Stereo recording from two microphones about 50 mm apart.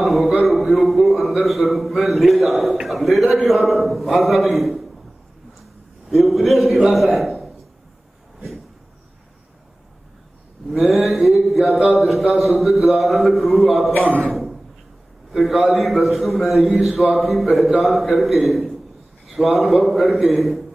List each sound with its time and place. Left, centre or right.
0.0 s a man's voice: centre
6.0 s a man's voice: centre
7.2 s a sound: centre
11.1 s a man's voice: centre
14.0 s speech: right
14.3 s a sound: centre
15.3 s a man's voice: centre